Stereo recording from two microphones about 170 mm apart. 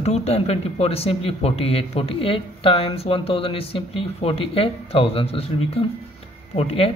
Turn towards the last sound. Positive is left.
turn(degrees=35)  # may be behind; listen again after turning